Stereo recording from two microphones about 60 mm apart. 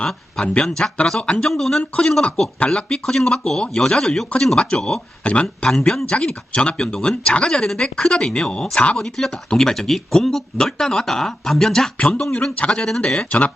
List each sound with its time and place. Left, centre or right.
0.0 s speech: centre
5.7 s speech: centre
9.0 s speech: centre
13.1 s speech: centre